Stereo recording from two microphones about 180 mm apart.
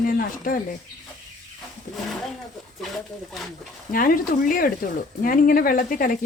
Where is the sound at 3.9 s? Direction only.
50° left (ahead or behind).